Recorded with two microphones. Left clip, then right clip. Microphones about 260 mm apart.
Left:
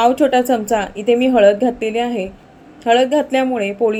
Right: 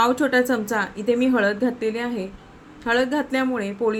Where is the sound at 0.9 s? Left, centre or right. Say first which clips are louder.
Left 8 dB; centre.